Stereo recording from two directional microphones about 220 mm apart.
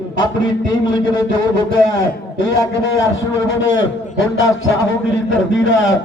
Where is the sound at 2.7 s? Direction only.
60° left (ahead or behind).